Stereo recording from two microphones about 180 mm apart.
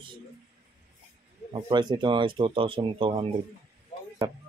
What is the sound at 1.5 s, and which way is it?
Speech, 25° right (ahead or behind).